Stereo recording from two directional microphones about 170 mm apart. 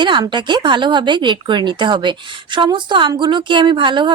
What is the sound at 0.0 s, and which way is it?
Speech, 25° right (ahead or behind).